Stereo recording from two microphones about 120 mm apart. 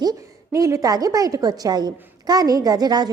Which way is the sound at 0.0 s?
30° right (ahead or behind).